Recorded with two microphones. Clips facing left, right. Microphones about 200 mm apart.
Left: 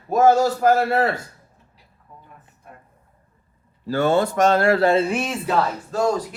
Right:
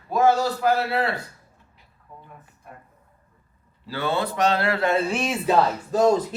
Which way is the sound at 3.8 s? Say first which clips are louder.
Left 7 dB; 45° left (ahead or behind).